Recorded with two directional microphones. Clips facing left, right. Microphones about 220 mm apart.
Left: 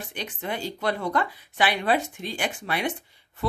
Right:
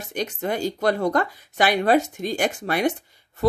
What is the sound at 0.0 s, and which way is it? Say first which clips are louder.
Speech: right 7 dB; 45° right (ahead or behind).